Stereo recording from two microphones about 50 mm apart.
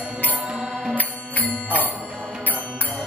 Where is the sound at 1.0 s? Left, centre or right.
Left.